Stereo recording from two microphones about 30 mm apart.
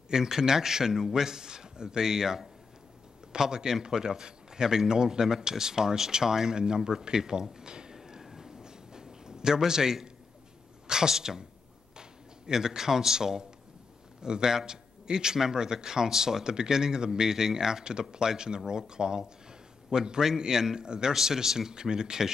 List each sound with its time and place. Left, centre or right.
0.1 s speech: centre
7.6 s a sound: right
7.9 s train: centre
8.4 s a sound: centre
9.7 s speech: right
12.5 s speech: centre